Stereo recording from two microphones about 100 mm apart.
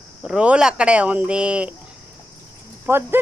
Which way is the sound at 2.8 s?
20° right (ahead or behind).